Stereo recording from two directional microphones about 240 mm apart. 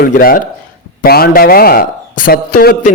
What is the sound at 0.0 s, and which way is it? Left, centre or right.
A man's voice, left.